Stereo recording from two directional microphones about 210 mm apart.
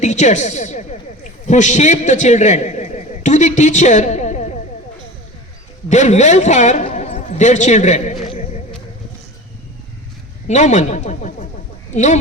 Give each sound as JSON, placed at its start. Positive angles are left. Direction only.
{"t": 0.0, "sound": "a woman's voice", "side_deg": 35}
{"t": 5.9, "sound": "a man's voice", "side_deg": 35}
{"t": 10.4, "sound": "a man's voice", "side_deg": 35}